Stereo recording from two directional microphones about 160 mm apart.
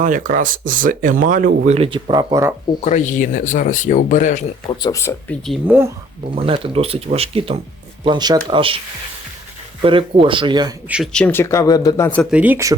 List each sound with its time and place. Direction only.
0.0 s speech: 55° right (ahead or behind); by 2.2 s 35° right (ahead or behind)
2.3 s speech: 15° right (ahead or behind)
2.8 s speech: 50° left (ahead or behind)
4.8 s speech: 20° left (ahead or behind)
5.6 s speech: 15° right (ahead or behind)
6.3 s speech: 35° right (ahead or behind)
9.8 s speech: 35° right (ahead or behind)
10.8 s speech: 5° right (ahead or behind)
11.1 s speech: 10° left (ahead or behind)
12.2 s speech: 10° right (ahead or behind)